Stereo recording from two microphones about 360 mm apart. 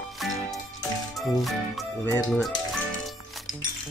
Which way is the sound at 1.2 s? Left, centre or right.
Centre.